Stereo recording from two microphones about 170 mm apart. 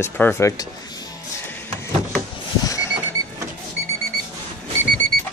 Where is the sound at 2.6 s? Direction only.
20° left (ahead or behind).